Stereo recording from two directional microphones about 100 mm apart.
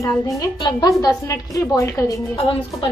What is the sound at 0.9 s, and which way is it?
A woman's voice, 35° left (ahead or behind).